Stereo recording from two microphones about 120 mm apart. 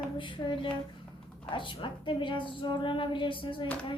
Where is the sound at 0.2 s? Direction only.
40° left (ahead or behind).